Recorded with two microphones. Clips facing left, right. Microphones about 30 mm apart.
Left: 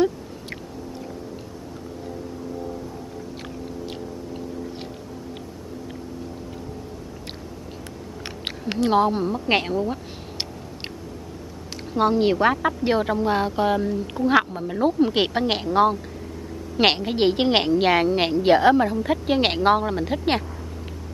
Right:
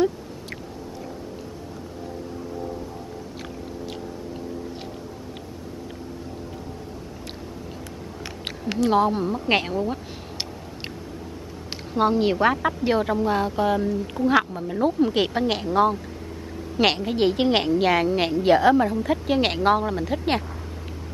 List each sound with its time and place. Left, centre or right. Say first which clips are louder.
3.3 s boat: left 1 dB; centre
8.5 s speech: even; centre
12.0 s speech: left 1 dB; centre
15.1 s a woman's voice: left 1 dB; left